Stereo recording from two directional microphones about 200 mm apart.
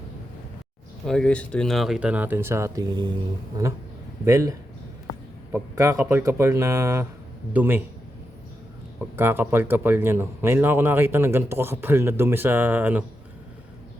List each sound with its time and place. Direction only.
1.0 s speech: 5° left (ahead or behind); by 3.1 s 20° right (ahead or behind)
3.6 s a sound: 20° right (ahead or behind)
4.3 s speech: 15° right (ahead or behind)
5.5 s speech: 15° right (ahead or behind)
9.0 s speech: 10° right (ahead or behind)